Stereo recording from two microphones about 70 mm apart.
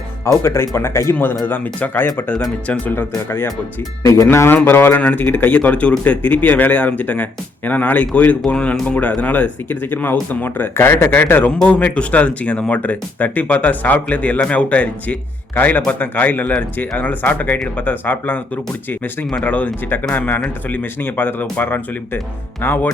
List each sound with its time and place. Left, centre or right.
0.3 s speech: left
4.0 s speech: left
4.3 s speech: left